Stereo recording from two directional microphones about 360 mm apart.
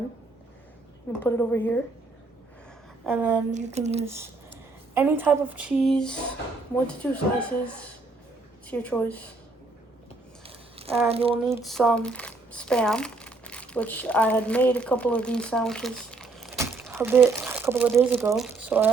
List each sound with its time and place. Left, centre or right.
1.2 s a woman's voice: centre
3.1 s a woman's voice: centre
3.5 s speech: centre
4.0 s a woman's voice: centre
10.4 s a sound: centre
11.1 s speech: centre